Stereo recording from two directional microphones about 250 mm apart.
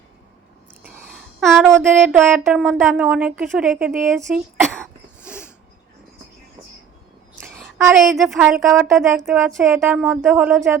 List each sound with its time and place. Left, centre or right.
1.4 s a sound: centre
2.0 s speech: centre
7.8 s a woman's voice: centre
8.1 s speech: centre